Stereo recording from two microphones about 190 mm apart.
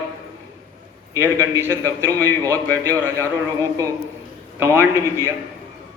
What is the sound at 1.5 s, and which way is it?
A man's voice, 15° right (ahead or behind).